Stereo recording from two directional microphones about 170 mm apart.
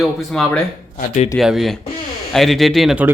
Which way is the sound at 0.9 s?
45° left (ahead or behind).